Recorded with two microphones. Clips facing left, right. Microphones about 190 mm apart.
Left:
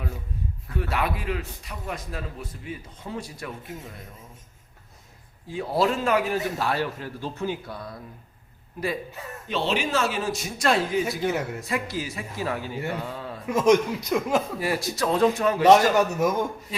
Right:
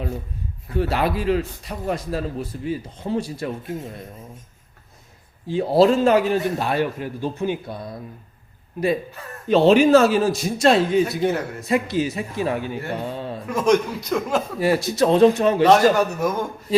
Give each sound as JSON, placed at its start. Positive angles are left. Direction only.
{"t": 0.8, "sound": "a man's voice", "side_deg": -30}
{"t": 5.5, "sound": "a man's voice", "side_deg": -30}
{"t": 9.5, "sound": "a man's voice", "side_deg": -45}
{"t": 10.6, "sound": "a man's voice", "side_deg": -25}
{"t": 13.5, "sound": "speech", "side_deg": 20}
{"t": 14.6, "sound": "a man's voice", "side_deg": -25}
{"t": 15.6, "sound": "a man's voice", "side_deg": 20}